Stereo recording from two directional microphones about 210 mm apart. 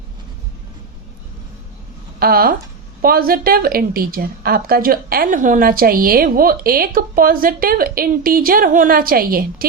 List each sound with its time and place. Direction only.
2.1 s a woman's voice: 45° right (ahead or behind)